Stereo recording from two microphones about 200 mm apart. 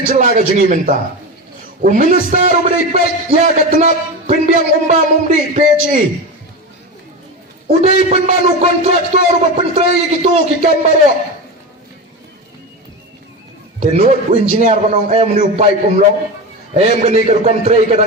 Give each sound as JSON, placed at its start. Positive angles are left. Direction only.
{"t": 0.1, "sound": "a man's voice", "side_deg": -40}
{"t": 7.7, "sound": "a man's voice", "side_deg": -35}
{"t": 13.7, "sound": "a man's voice", "side_deg": -30}